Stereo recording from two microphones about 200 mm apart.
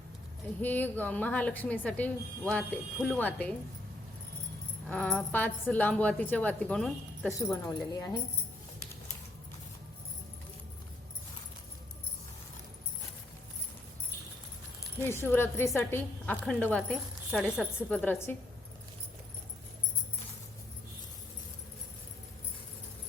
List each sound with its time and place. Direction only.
0.6 s a woman's voice: 10° left (ahead or behind)
4.9 s a woman's voice: 5° left (ahead or behind)
7.3 s a woman's voice: 15° left (ahead or behind)
15.0 s a woman's voice: 10° left (ahead or behind)